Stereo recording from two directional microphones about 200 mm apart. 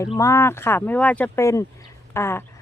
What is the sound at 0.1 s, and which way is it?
Speech, 15° left (ahead or behind).